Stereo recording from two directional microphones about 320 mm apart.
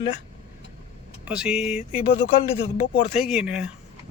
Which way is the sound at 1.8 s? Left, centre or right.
Centre.